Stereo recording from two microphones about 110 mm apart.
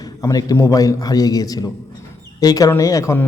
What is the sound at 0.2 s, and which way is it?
A man's voice, 35° left (ahead or behind).